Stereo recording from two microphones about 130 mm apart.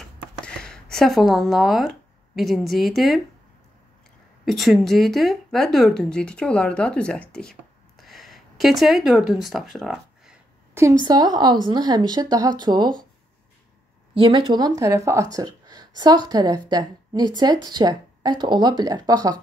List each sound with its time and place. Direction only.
0.6 s speech: 5° left (ahead or behind)
4.5 s a woman's voice: centre (ahead or behind)
10.7 s a sound: 20° right (ahead or behind)
11.1 s speech: 30° right (ahead or behind)
14.1 s speech: 40° right (ahead or behind); by 15.2 s 25° right (ahead or behind)
15.3 s a sound: 30° right (ahead or behind)
16.0 s speech: 30° right (ahead or behind)